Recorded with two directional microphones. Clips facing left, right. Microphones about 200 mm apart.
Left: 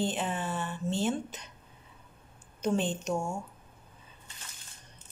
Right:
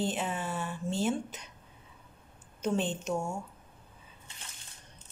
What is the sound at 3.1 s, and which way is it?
Speech, 10° left (ahead or behind).